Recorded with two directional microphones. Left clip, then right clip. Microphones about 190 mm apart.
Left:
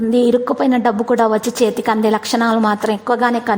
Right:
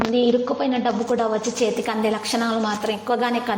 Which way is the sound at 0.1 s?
55° left (ahead or behind).